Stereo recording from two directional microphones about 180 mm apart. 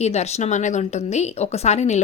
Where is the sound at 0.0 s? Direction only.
40° left (ahead or behind).